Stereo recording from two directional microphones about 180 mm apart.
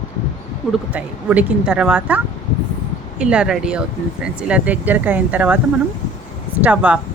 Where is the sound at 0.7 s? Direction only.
10° right (ahead or behind).